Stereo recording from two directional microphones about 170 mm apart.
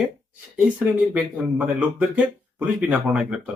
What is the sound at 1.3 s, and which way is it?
Speech, 10° right (ahead or behind).